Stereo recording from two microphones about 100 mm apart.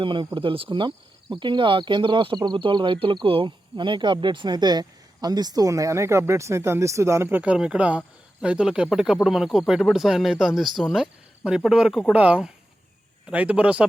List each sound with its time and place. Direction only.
0.0 s speech: 55° right (ahead or behind); by 13.8 s 10° right (ahead or behind)